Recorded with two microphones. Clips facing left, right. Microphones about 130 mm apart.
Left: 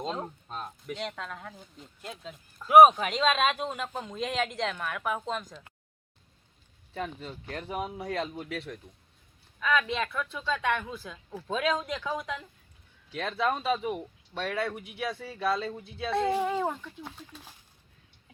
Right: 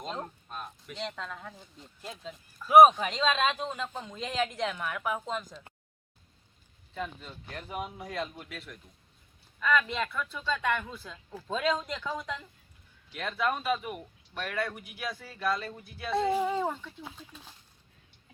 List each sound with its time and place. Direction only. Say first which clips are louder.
0.4 s speech: left 4 dB; 20° left (ahead or behind)
0.9 s speech: right 1 dB; 5° left (ahead or behind)
7.0 s speech: left 2 dB; 40° left (ahead or behind)
9.6 s speech: even; 5° left (ahead or behind)
13.1 s speech: left 2 dB; 25° left (ahead or behind)
16.0 s speech: even; centre (ahead or behind)